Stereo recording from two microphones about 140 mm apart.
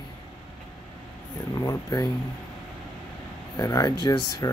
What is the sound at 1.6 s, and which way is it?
Speech, 30° left (ahead or behind).